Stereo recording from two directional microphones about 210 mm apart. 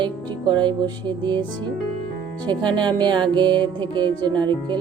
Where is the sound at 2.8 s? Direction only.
20° right (ahead or behind).